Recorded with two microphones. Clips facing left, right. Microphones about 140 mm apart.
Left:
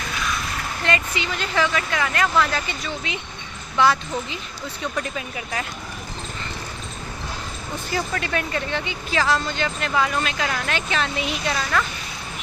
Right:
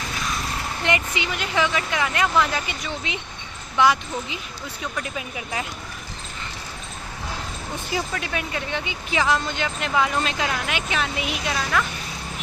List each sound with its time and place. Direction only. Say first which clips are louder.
0.9 s speech: even; 20° right (ahead or behind)
4.8 s speech: left 3 dB; 5° right (ahead or behind)
7.9 s speech: left 3 dB; 5° right (ahead or behind)